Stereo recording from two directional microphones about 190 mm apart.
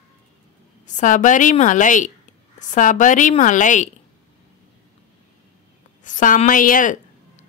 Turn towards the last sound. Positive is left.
turn(degrees=45)  # may be behind; listen again after turning